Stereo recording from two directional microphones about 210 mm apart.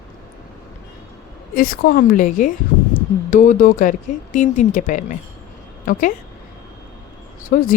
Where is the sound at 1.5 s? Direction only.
45° left (ahead or behind).